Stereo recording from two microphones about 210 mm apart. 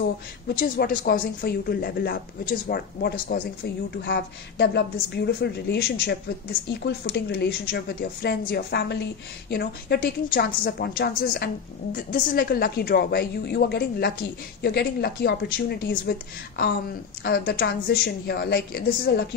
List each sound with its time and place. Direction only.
0.6 s a woman's voice: 45° left (ahead or behind)